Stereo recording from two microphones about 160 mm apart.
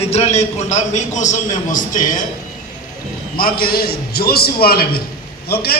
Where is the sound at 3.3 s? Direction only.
65° left (ahead or behind).